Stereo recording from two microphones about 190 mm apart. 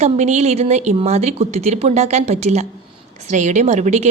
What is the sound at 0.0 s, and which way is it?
A woman's voice, 35° right (ahead or behind).